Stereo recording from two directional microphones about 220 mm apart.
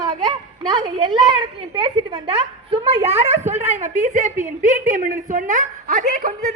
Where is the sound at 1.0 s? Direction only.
20° right (ahead or behind).